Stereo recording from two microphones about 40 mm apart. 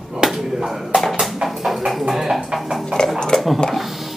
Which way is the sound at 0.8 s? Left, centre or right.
Centre.